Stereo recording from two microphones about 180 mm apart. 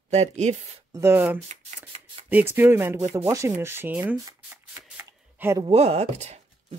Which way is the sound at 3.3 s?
15° right (ahead or behind).